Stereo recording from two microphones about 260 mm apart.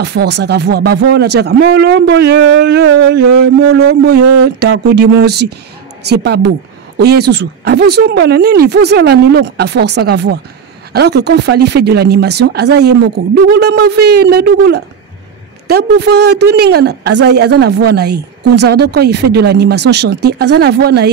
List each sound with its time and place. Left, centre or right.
0.0 s a woman's voice: right